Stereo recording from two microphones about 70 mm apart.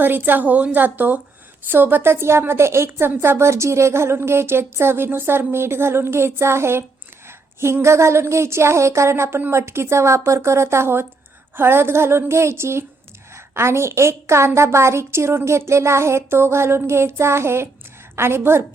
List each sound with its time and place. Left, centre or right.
0.0 s a woman's voice: right